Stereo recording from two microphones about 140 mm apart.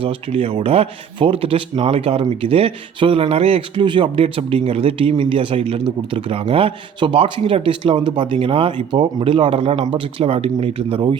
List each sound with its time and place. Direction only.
0.0 s speech: 40° right (ahead or behind)